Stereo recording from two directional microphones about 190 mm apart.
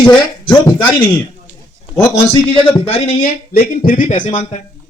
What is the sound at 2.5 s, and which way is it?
Speech, 30° left (ahead or behind).